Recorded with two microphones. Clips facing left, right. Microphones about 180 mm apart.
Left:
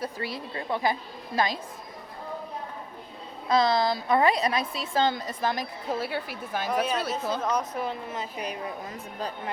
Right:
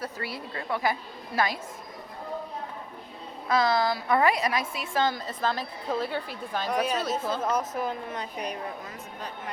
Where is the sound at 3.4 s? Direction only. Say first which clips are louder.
Left 1 dB; 20° left (ahead or behind); by 8.6 s 5° left (ahead or behind).